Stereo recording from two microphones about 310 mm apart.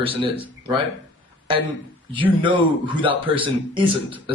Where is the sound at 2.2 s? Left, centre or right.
Centre.